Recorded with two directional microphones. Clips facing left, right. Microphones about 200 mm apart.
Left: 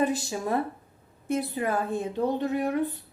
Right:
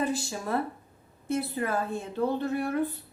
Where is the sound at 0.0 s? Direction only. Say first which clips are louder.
Left 3 dB; 20° left (ahead or behind).